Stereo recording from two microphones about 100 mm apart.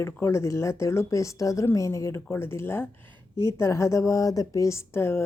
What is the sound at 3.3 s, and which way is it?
Speech, 45° right (ahead or behind).